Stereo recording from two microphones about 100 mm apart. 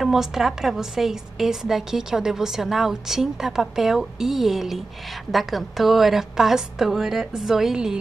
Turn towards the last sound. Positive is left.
turn(degrees=-5)  # may be behind; listen again after turning